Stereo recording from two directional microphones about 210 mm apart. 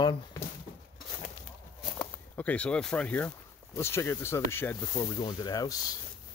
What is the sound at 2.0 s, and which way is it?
Speech, 5° left (ahead or behind).